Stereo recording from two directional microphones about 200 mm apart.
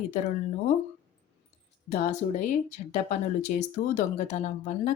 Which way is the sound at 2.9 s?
35° left (ahead or behind).